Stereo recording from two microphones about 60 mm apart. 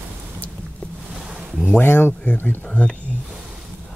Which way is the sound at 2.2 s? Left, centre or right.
Left.